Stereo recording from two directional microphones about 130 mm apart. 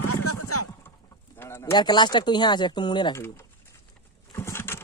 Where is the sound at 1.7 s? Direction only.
35° left (ahead or behind).